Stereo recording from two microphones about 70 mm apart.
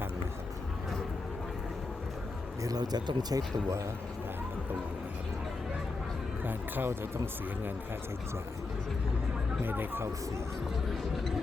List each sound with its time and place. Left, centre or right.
2.6 s speech: right
6.4 s speech: right
9.6 s speech: right